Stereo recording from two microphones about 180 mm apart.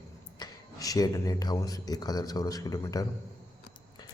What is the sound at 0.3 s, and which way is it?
Speech, 20° left (ahead or behind).